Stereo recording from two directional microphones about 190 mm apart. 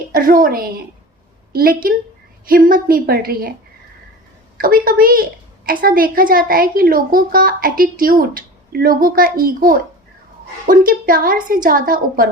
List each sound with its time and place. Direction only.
0.1 s a woman's voice: 45° right (ahead or behind)
4.5 s a woman's voice: 50° right (ahead or behind)